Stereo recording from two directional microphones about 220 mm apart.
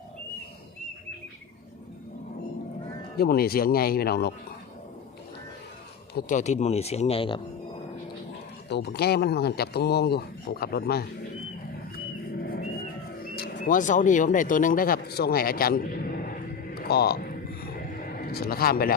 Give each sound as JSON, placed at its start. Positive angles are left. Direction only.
{"t": 3.2, "sound": "speech", "side_deg": 45}
{"t": 6.1, "sound": "speech", "side_deg": 35}
{"t": 8.7, "sound": "speech", "side_deg": 50}
{"t": 12.4, "sound": "a sound", "side_deg": 40}
{"t": 13.2, "sound": "speech", "side_deg": 45}
{"t": 18.3, "sound": "speech", "side_deg": 45}